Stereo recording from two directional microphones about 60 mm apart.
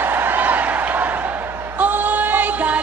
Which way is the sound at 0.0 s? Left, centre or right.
Right.